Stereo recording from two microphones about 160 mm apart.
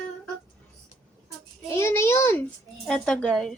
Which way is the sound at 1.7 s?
15° left (ahead or behind).